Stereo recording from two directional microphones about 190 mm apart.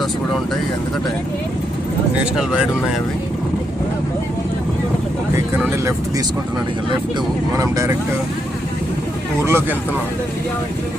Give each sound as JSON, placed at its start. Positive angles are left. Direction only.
{"t": 2.3, "sound": "speech", "side_deg": -5}
{"t": 7.5, "sound": "speech", "side_deg": -15}
{"t": 9.4, "sound": "speech", "side_deg": -10}